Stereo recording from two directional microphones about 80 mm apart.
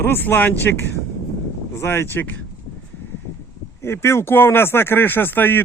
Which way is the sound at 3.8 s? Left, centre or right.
Left.